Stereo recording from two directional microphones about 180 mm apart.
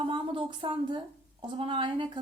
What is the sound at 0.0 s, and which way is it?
A woman's voice, 30° right (ahead or behind).